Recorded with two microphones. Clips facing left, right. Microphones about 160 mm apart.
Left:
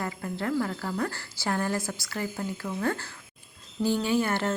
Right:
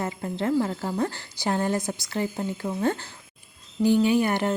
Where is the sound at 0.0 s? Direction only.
20° right (ahead or behind).